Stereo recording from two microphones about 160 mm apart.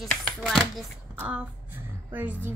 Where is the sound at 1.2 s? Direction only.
10° right (ahead or behind).